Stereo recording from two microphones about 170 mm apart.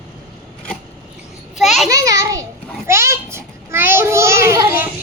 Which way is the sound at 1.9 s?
20° right (ahead or behind).